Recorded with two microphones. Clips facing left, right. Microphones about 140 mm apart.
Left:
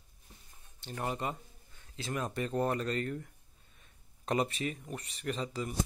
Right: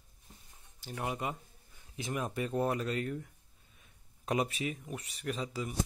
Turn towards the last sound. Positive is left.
turn(degrees=-5)  # may be behind; listen again after turning